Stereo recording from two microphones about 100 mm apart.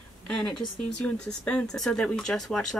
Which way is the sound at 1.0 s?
10° left (ahead or behind).